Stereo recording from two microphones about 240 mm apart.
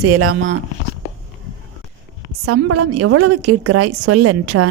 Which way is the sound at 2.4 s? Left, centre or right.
Right.